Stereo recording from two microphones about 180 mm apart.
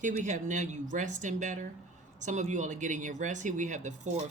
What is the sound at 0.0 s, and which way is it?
Speech, 45° right (ahead or behind).